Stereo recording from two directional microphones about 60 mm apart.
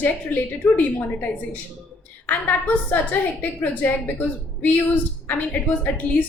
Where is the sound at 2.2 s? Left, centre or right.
Left.